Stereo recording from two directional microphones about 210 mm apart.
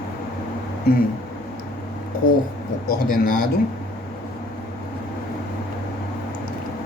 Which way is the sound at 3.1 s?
40° left (ahead or behind).